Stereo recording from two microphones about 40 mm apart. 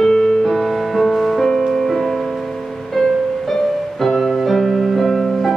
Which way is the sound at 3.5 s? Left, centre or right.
Centre.